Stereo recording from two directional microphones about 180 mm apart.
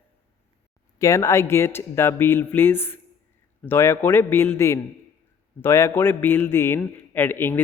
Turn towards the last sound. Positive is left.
turn(degrees=10)  # may be behind; listen again after turning